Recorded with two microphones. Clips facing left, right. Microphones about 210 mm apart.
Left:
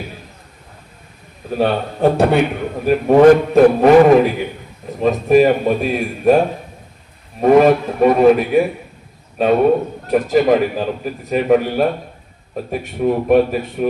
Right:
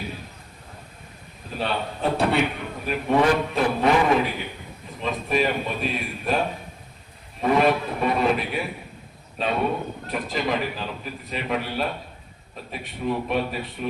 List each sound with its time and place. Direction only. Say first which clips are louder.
1.5 s a man's voice: left 10 dB; 50° left (ahead or behind)
7.4 s a man's voice: left 10 dB; 45° left (ahead or behind)